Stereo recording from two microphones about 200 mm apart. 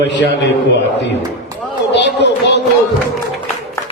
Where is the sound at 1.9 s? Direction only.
60° left (ahead or behind).